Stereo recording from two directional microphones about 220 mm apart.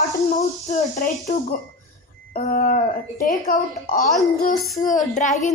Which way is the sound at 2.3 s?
40° left (ahead or behind).